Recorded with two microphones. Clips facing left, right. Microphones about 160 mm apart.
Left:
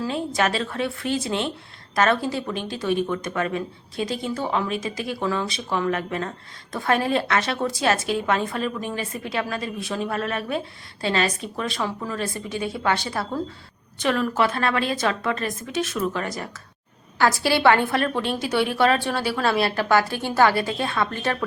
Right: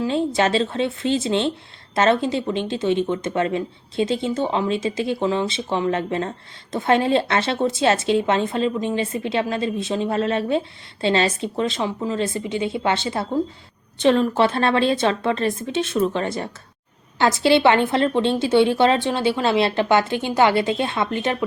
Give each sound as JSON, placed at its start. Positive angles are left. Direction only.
{"t": 0.0, "sound": "speech", "side_deg": -25}